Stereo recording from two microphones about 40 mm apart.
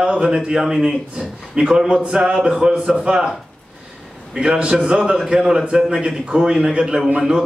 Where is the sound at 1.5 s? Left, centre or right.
Right.